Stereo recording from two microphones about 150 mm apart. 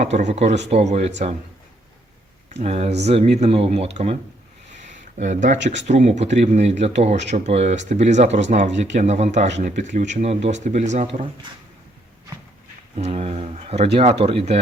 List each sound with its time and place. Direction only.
0.0 s speech: 50° right (ahead or behind)
2.5 s speech: 45° right (ahead or behind)
4.9 s speech: 55° right (ahead or behind)
11.0 s speech: 40° right (ahead or behind)
13.0 s speech: 45° right (ahead or behind)